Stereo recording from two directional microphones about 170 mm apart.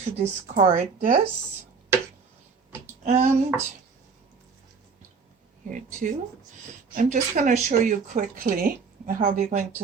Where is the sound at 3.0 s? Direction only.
40° right (ahead or behind).